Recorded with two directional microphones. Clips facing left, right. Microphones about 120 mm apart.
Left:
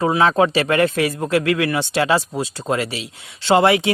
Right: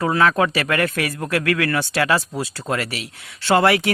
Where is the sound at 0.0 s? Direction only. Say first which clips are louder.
Left 2 dB; 25° left (ahead or behind).